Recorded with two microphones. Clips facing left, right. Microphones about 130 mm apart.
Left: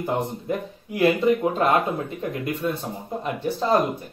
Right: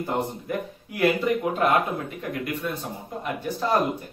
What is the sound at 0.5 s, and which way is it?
Speech, 25° left (ahead or behind).